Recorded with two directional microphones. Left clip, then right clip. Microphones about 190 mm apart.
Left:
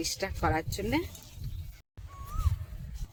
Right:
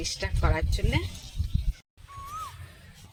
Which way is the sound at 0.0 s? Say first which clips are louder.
Even; 70° left (ahead or behind).